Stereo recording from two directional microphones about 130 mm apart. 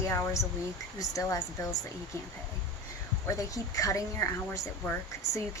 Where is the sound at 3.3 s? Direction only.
25° left (ahead or behind).